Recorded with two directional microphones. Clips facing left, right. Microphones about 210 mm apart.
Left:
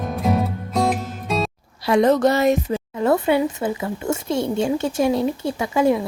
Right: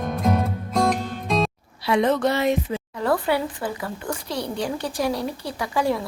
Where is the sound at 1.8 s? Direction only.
45° left (ahead or behind).